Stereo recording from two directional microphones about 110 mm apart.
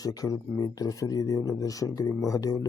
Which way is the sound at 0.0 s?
35° left (ahead or behind).